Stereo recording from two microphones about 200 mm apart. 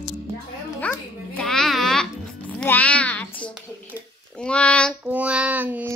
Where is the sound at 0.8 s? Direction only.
5° left (ahead or behind).